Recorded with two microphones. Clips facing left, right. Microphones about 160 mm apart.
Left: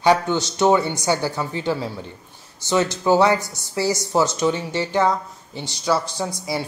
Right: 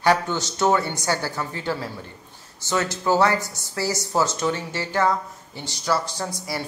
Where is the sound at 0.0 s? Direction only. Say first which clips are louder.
Left 3 dB; 20° left (ahead or behind).